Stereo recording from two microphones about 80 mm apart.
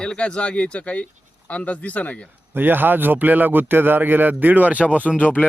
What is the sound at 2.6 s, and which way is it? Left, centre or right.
A man's voice, right.